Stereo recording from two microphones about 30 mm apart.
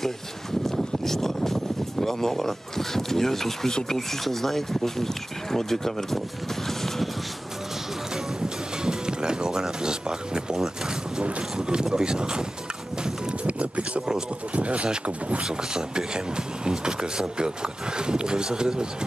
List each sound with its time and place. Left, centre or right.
0.7 s speech: centre
6.7 s music: centre
8.8 s speech: right
13.4 s music: right
14.5 s speech: right
15.5 s speech: right